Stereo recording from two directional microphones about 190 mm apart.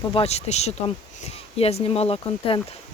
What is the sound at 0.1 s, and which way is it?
Speech, 30° left (ahead or behind).